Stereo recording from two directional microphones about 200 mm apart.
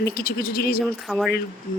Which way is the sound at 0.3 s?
50° left (ahead or behind).